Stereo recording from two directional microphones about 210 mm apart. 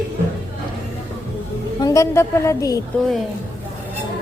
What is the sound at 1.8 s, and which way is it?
A woman's voice, 15° left (ahead or behind).